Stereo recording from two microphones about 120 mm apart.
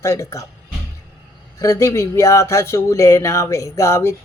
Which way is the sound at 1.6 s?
25° left (ahead or behind).